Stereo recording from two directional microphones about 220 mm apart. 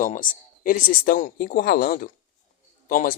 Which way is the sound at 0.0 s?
35° left (ahead or behind).